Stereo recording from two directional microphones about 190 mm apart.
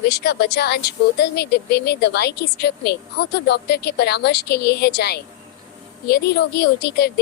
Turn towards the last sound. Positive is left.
turn(degrees=55)  # may be behind; listen again after turning